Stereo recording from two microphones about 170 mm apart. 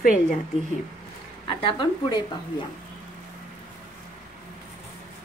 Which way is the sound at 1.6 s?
30° left (ahead or behind).